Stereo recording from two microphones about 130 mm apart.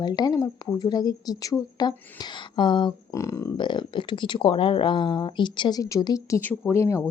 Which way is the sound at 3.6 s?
35° left (ahead or behind).